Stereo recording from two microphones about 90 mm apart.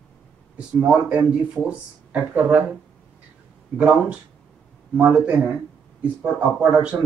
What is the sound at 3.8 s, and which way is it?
Speech, 15° right (ahead or behind).